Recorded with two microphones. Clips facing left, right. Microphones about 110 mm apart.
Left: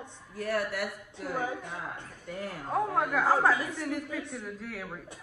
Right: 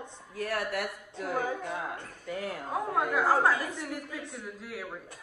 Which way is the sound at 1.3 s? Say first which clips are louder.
Right 2 dB; 35° right (ahead or behind).